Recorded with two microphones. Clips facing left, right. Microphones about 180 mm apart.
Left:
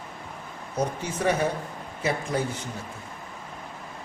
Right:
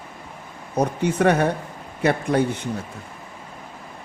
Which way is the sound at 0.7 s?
65° right (ahead or behind).